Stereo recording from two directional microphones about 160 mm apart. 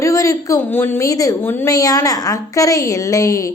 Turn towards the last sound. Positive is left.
turn(degrees=20)  # may be behind; listen again after turning